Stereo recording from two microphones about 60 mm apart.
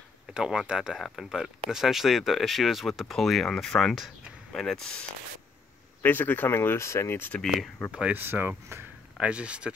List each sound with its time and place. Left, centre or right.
0.3 s speech: centre
6.0 s speech: left
8.1 s speech: right
9.2 s speech: centre